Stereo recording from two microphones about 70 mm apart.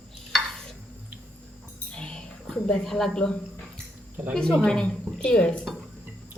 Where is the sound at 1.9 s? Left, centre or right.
Centre.